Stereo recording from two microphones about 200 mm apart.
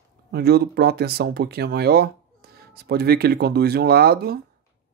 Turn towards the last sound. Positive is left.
turn(degrees=-50)  # may be behind; listen again after turning